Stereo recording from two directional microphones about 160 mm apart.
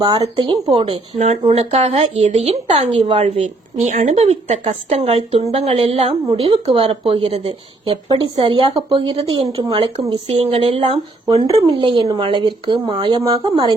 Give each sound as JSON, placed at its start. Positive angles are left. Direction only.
{"t": 0.2, "sound": "speech", "side_deg": -30}
{"t": 1.5, "sound": "speech", "side_deg": -40}
{"t": 3.2, "sound": "speech", "side_deg": -50}